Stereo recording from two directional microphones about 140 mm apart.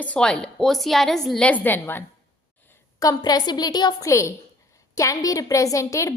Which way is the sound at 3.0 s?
25° left (ahead or behind).